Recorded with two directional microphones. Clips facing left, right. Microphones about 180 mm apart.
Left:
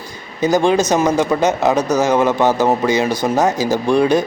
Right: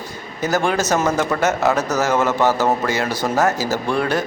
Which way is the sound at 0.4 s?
15° left (ahead or behind).